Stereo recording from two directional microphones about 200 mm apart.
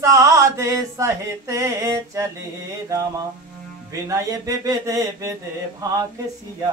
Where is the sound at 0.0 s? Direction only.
15° right (ahead or behind).